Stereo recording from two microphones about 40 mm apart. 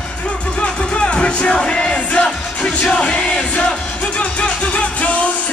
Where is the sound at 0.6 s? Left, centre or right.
Left.